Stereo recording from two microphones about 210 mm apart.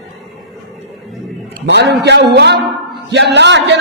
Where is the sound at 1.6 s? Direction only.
55° right (ahead or behind).